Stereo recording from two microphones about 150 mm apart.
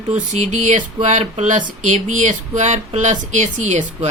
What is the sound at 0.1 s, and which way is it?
Speech, 50° right (ahead or behind).